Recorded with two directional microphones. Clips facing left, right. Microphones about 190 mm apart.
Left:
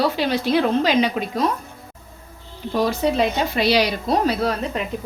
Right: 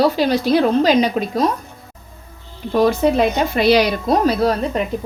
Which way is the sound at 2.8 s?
50° right (ahead or behind).